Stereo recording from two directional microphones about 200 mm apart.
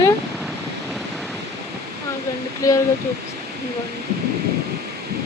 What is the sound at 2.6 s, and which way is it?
Speech, 15° left (ahead or behind).